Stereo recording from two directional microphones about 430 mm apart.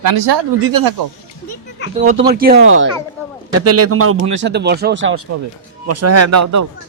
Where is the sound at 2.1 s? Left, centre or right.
Centre; by 6.6 s right.